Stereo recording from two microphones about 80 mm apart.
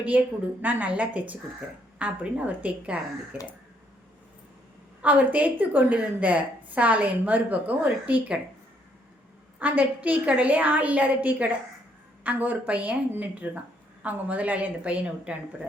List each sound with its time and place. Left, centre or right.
0.1 s a woman's voice: centre
5.0 s a woman's voice: centre
9.6 s a woman's voice: centre